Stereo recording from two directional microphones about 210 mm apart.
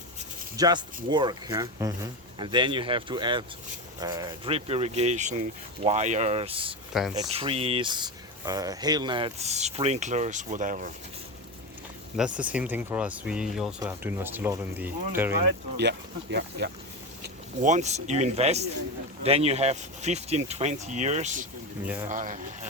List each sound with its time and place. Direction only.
0.5 s speech: 20° right (ahead or behind)
6.9 s speech: centre (ahead or behind)
7.3 s speech: 25° right (ahead or behind)
12.1 s speech: 5° right (ahead or behind)
15.8 s speech: 55° right (ahead or behind)
17.2 s speech: 35° right (ahead or behind)